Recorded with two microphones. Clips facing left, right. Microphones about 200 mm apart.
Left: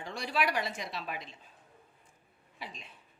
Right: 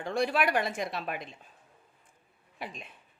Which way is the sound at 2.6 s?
55° right (ahead or behind).